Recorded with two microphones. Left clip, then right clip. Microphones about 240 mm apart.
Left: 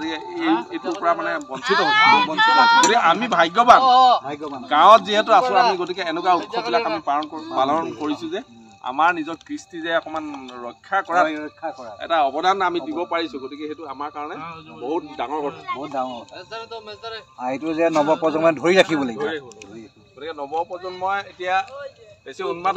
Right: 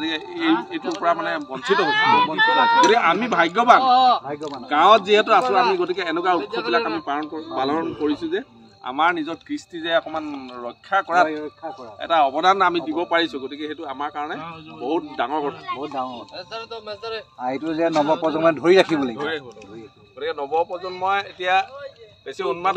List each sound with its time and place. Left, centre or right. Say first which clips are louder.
0.0 s speech: right 1 dB; right
1.7 s speech: left 2 dB; left
2.9 s speech: left 1 dB; centre
3.8 s speech: left 2 dB; left
4.6 s a man's voice: left 2 dB; centre
6.4 s speech: left 1 dB; left
7.1 s a man's voice: left 3 dB; centre
8.8 s speech: left 1 dB; centre; by 11.2 s right
11.2 s speech: left 1 dB; left
12.0 s a man's voice: right 2 dB; right
15.8 s speech: left 2 dB; left
16.5 s a man's voice: right 1 dB; right
17.4 s speech: left 2 dB; left
19.1 s a man's voice: left 1 dB; right